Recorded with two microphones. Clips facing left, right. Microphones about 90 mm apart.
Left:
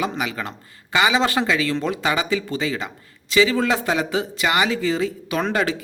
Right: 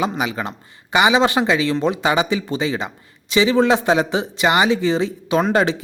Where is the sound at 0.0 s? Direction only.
20° right (ahead or behind).